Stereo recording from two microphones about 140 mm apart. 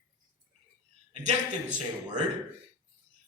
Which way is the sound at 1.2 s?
55° right (ahead or behind).